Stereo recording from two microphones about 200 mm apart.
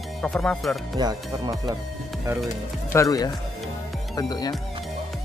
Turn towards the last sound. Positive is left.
turn(degrees=20)  # may be behind; listen again after turning